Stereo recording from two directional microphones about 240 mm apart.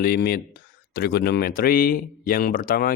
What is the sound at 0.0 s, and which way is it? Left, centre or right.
Speech, left.